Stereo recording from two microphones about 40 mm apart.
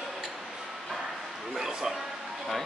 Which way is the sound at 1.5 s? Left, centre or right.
Centre.